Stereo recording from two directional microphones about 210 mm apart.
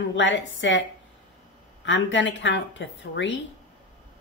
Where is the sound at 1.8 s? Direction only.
60° left (ahead or behind).